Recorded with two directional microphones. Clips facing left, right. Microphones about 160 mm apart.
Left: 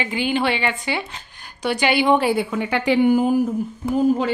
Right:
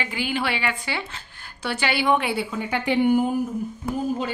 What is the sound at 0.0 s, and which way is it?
Speech, 20° left (ahead or behind).